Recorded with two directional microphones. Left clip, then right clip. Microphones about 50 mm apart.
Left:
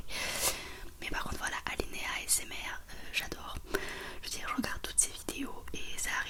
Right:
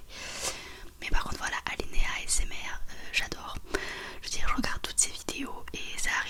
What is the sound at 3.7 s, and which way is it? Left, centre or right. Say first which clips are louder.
Whispering: right 3 dB; centre.